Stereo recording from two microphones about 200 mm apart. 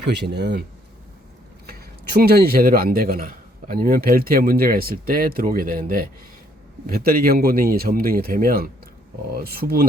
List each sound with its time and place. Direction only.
0.1 s speech: 55° right (ahead or behind)
1.6 s speech: 50° right (ahead or behind)